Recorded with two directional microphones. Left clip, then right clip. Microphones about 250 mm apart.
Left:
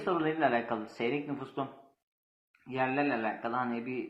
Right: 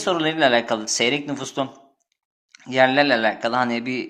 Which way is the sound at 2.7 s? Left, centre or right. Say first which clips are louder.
Right 14 dB; right.